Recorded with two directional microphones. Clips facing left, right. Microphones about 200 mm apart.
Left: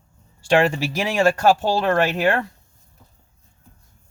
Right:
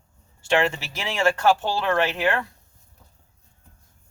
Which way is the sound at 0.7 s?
40° left (ahead or behind).